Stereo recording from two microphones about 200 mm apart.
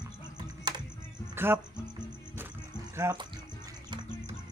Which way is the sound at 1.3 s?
10° right (ahead or behind).